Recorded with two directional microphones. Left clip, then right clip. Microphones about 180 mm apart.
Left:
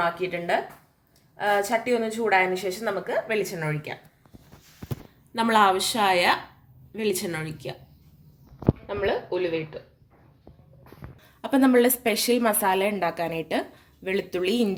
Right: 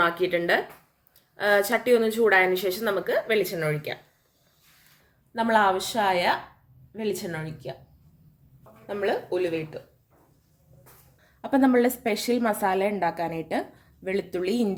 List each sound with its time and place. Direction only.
0.0 s a woman's voice: 25° right (ahead or behind)
5.3 s a woman's voice: 10° left (ahead or behind)
8.9 s a woman's voice: 5° right (ahead or behind)
11.2 s a woman's voice: 5° right (ahead or behind)